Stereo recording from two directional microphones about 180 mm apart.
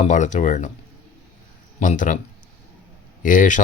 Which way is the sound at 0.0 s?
45° left (ahead or behind).